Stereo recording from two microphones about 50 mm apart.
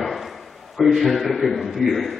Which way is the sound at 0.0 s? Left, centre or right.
Centre.